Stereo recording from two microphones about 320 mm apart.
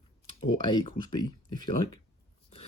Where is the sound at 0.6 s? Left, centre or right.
Centre.